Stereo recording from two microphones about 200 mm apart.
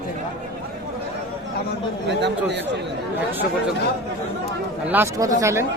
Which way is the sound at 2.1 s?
60° right (ahead or behind).